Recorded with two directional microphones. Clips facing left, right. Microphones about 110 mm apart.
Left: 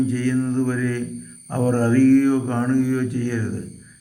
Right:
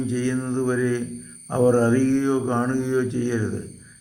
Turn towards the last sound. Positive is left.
turn(degrees=-20)  # may be behind; listen again after turning